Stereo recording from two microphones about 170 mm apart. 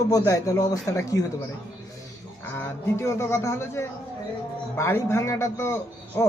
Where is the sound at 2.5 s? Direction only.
15° left (ahead or behind).